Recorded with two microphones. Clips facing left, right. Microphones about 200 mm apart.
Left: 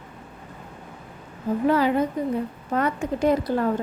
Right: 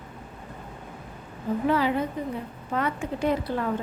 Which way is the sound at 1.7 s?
45° left (ahead or behind).